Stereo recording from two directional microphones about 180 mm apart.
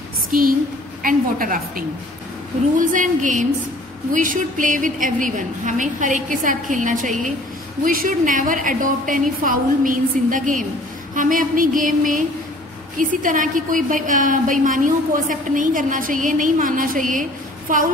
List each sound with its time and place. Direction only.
0.3 s a woman's voice: 50° right (ahead or behind)